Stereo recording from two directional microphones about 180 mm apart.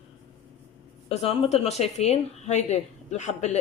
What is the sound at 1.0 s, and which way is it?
Speech, 35° left (ahead or behind).